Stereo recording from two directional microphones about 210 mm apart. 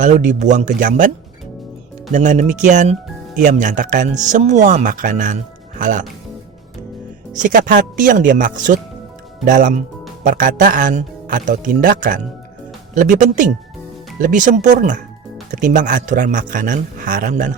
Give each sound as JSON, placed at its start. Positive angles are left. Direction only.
{"t": 0.0, "sound": "a man's voice", "side_deg": -35}
{"t": 2.1, "sound": "a man's voice", "side_deg": -35}
{"t": 7.3, "sound": "a man's voice", "side_deg": -40}